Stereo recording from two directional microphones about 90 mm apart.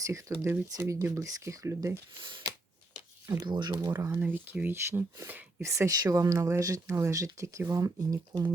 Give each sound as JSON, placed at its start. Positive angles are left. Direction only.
{"t": 0.0, "sound": "speech", "side_deg": -35}
{"t": 3.2, "sound": "speech", "side_deg": -45}
{"t": 3.9, "sound": "speech", "side_deg": -30}
{"t": 5.6, "sound": "speech", "side_deg": -35}